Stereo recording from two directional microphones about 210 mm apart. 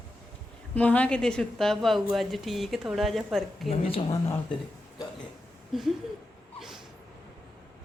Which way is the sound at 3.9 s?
20° left (ahead or behind).